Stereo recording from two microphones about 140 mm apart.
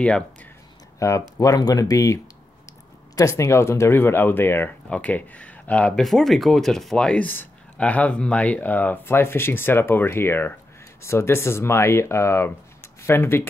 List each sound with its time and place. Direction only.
0.0 s speech: 10° left (ahead or behind)
0.9 s speech: 20° left (ahead or behind)
3.2 s speech: 20° left (ahead or behind)